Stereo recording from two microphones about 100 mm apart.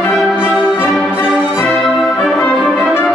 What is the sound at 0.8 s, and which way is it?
Music, 10° right (ahead or behind).